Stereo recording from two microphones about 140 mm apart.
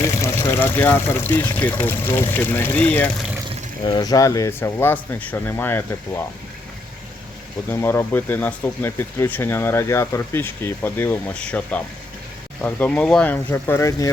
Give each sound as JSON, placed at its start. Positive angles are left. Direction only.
{"t": 0.0, "sound": "speech", "side_deg": 20}
{"t": 3.8, "sound": "speech", "side_deg": 30}
{"t": 7.7, "sound": "speech", "side_deg": 15}